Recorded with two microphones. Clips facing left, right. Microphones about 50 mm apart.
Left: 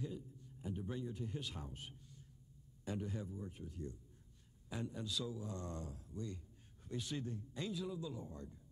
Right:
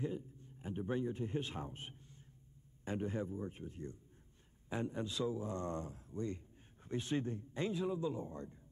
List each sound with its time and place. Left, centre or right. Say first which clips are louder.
0.0 s a man's voice: right 5 dB; right